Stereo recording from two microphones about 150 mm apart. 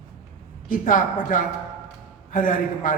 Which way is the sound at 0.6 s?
65° left (ahead or behind).